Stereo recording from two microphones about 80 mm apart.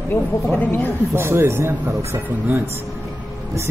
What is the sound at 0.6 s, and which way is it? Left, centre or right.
Speech, left.